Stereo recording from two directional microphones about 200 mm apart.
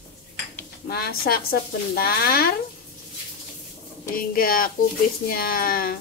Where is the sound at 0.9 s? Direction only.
50° left (ahead or behind).